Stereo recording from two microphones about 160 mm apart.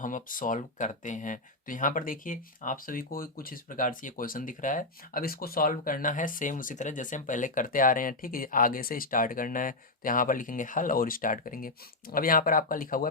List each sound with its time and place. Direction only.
0.0 s speech: 55° left (ahead or behind)